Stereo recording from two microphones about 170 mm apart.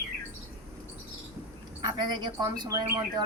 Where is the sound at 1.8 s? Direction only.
25° right (ahead or behind).